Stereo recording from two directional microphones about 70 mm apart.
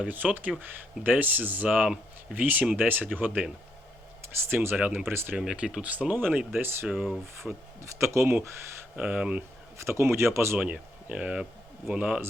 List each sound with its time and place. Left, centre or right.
0.0 s speech: right
4.4 s speech: right
5.4 s speech: centre
5.8 s speech: right
6.8 s speech: centre
7.8 s speech: right
9.0 s speech: centre
9.8 s speech: right
10.6 s speech: centre